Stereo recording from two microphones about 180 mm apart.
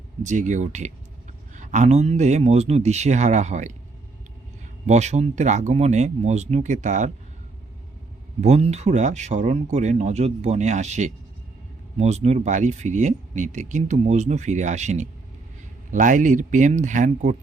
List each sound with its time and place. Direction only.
0.2 s speech: 40° right (ahead or behind)
4.9 s speech: 40° right (ahead or behind)
8.4 s speech: 35° right (ahead or behind)